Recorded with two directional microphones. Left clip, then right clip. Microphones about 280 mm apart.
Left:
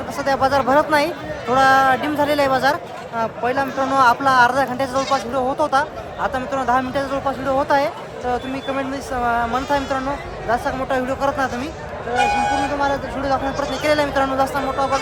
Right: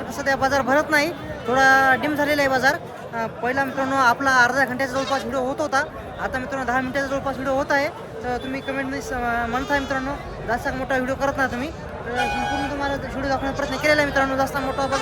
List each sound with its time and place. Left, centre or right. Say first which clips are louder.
0.2 s speech: left 3 dB; centre
12.1 s speech: left 6 dB; left
12.8 s speech: left 5 dB; centre